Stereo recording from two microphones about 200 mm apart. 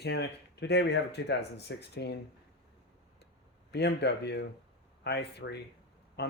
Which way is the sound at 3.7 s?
55° left (ahead or behind).